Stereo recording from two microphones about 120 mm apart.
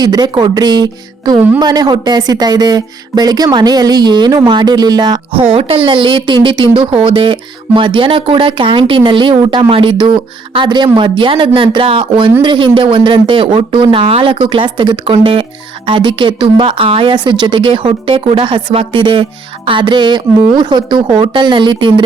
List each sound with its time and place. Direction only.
0.0 s speech: 35° right (ahead or behind)
5.5 s speech: 50° right (ahead or behind)